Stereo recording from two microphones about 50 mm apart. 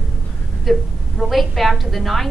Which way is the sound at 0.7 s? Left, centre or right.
Centre.